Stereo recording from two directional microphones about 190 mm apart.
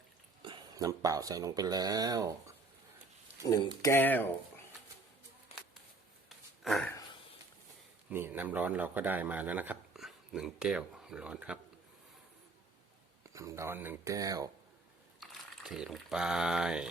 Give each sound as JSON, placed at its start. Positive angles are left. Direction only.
{"t": 0.4, "sound": "speech", "side_deg": -20}
{"t": 3.4, "sound": "speech", "side_deg": 20}
{"t": 6.2, "sound": "a sound", "side_deg": 0}
{"t": 8.1, "sound": "speech", "side_deg": -10}
{"t": 13.2, "sound": "speech", "side_deg": -15}
{"t": 15.2, "sound": "speech", "side_deg": 0}